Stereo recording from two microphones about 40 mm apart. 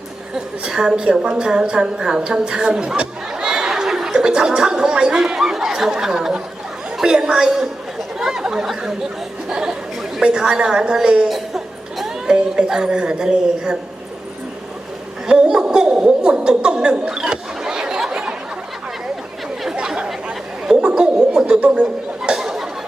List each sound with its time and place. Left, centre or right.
0.3 s a woman's voice: centre
8.2 s chatter: centre
9.5 s a woman's voice: centre
11.3 s speech: centre
15.3 s a sound: right
20.7 s a sound: centre